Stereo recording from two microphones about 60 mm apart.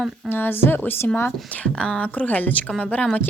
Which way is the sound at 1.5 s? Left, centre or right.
Centre.